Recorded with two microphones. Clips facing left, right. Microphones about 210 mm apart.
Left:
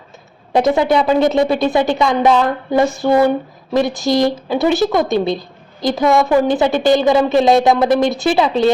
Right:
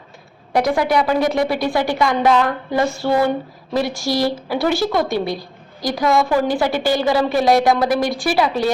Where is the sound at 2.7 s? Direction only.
15° left (ahead or behind).